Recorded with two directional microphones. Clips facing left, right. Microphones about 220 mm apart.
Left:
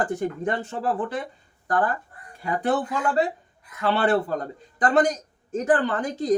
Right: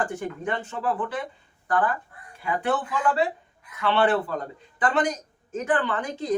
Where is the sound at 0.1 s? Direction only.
40° left (ahead or behind).